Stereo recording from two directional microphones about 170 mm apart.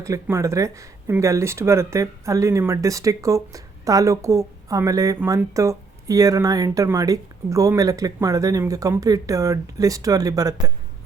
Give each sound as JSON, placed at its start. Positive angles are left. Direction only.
{"t": 0.0, "sound": "speech", "side_deg": -20}